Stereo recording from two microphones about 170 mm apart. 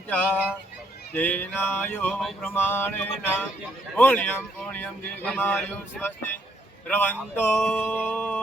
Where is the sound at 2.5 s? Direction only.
10° left (ahead or behind).